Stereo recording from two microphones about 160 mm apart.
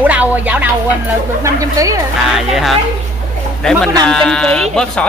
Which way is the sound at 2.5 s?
Centre (ahead or behind).